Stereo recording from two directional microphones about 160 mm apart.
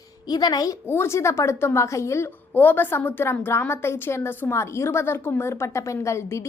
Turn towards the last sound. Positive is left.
turn(degrees=15)  # may be behind; listen again after turning